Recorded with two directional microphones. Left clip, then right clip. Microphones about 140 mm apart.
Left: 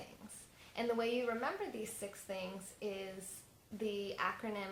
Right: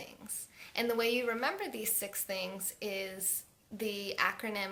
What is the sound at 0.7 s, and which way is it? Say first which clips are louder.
A woman's voice: right 5 dB; 15° right (ahead or behind).